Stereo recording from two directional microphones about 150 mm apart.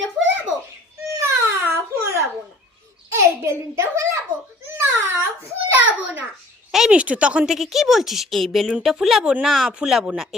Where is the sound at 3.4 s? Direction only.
20° right (ahead or behind).